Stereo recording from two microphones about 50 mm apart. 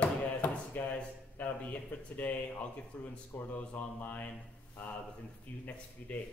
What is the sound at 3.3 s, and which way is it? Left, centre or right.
Speech, left.